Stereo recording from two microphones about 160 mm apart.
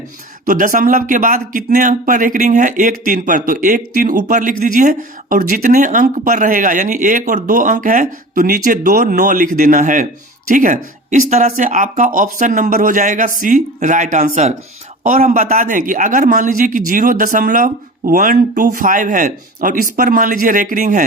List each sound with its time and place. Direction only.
0.4 s speech: 55° right (ahead or behind)